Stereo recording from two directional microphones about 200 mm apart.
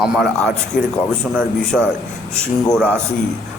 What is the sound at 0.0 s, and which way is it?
Speech, centre (ahead or behind).